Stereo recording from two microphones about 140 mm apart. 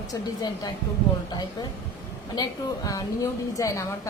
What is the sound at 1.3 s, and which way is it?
A woman's voice, 30° left (ahead or behind).